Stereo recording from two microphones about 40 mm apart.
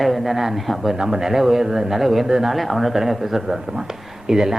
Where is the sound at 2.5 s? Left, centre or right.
Centre.